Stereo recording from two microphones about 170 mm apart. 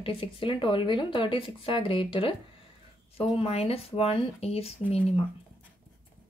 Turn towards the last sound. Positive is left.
turn(degrees=35)  # may be behind; listen again after turning